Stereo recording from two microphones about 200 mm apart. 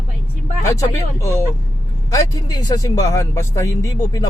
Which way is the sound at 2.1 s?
20° left (ahead or behind).